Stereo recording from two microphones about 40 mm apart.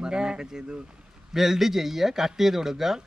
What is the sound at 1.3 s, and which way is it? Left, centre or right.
Speech, centre.